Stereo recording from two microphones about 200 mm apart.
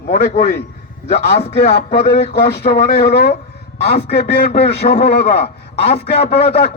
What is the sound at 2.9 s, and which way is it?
Speech, 55° left (ahead or behind).